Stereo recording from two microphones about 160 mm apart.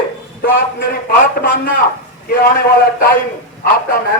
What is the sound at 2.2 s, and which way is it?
Speech, 75° left (ahead or behind).